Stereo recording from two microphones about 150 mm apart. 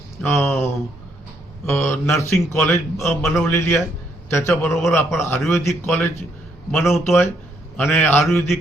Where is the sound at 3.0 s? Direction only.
Centre (ahead or behind).